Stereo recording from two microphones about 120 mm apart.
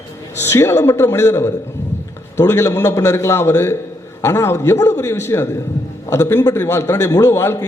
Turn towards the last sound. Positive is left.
turn(degrees=20)  # may be behind; listen again after turning